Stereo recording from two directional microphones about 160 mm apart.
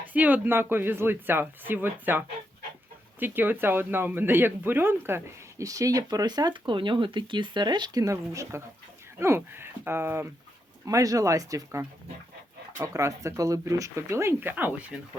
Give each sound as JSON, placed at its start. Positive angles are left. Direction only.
{"t": 0.1, "sound": "speech", "side_deg": -10}